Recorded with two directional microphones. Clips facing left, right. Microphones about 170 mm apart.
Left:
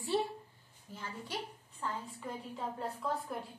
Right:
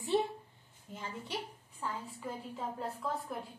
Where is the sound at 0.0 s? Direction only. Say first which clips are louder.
Right 2 dB; 20° right (ahead or behind).